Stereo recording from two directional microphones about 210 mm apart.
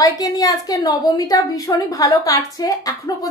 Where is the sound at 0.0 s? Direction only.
15° left (ahead or behind).